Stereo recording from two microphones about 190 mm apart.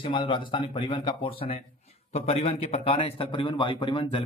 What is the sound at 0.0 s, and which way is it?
A man's voice, 25° left (ahead or behind).